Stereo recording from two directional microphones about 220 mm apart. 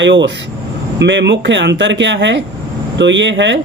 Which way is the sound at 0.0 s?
55° right (ahead or behind).